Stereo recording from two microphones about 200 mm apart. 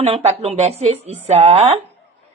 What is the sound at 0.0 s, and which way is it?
Speech, 30° right (ahead or behind).